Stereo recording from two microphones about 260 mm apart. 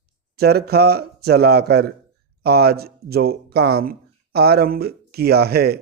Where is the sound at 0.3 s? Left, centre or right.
Right.